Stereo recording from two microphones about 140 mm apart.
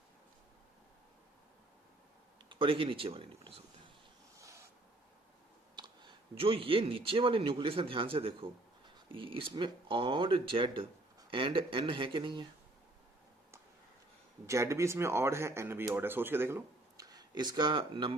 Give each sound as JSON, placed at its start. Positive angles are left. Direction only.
{"t": 2.5, "sound": "speech", "side_deg": -40}
{"t": 4.4, "sound": "snort", "side_deg": -20}
{"t": 5.7, "sound": "speech", "side_deg": -30}
{"t": 14.4, "sound": "speech", "side_deg": -20}